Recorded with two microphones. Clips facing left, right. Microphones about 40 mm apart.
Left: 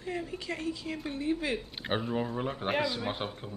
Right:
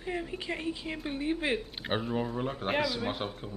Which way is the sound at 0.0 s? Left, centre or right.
Centre.